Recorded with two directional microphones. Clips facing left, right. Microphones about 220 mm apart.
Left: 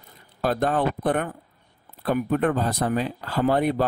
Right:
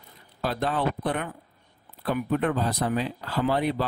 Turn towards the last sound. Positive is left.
turn(degrees=50)  # may be behind; listen again after turning